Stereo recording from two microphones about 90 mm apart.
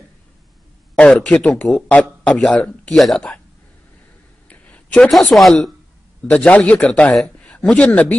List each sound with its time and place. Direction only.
0.9 s speech: 10° left (ahead or behind)
4.5 s a sound: 15° left (ahead or behind)
5.3 s speech: 5° left (ahead or behind)
6.2 s speech: 15° left (ahead or behind)